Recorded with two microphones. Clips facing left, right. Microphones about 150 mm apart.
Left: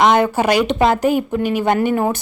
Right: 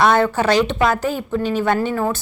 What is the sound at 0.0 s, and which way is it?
A woman's voice, 15° left (ahead or behind).